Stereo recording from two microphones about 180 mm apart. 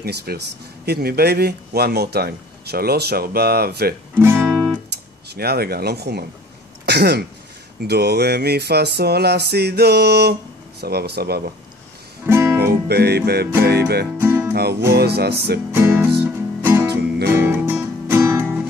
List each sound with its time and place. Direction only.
0.0 s a man's voice: 60° right (ahead or behind)
4.4 s music: 5° left (ahead or behind)
5.3 s a man's voice: 60° right (ahead or behind)
6.9 s throat clearing: 65° right (ahead or behind)
7.8 s a man's voice: 65° right (ahead or behind)
12.3 s music: 15° right (ahead or behind)
12.5 s music: 65° right (ahead or behind)
13.7 s a man's voice: 60° right (ahead or behind)
14.2 s music: 10° right (ahead or behind)
14.5 s music: 65° right (ahead or behind)
14.9 s a man's voice: 60° right (ahead or behind)
15.7 s music: 10° right (ahead or behind)